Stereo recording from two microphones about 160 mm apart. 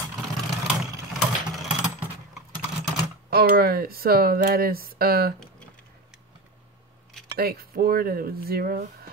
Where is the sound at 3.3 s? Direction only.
75° right (ahead or behind).